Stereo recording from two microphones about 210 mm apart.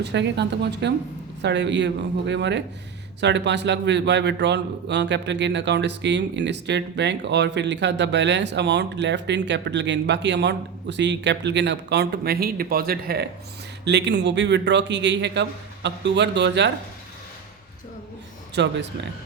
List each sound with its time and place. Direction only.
0.0 s a man's voice: 55° right (ahead or behind)
18.5 s a man's voice: 55° right (ahead or behind)